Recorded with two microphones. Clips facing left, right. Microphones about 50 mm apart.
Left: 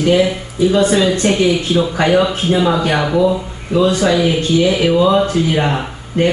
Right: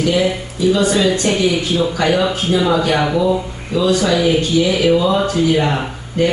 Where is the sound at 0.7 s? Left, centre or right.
Left.